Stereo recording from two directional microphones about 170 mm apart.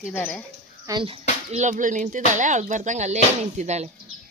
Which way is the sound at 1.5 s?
45° right (ahead or behind).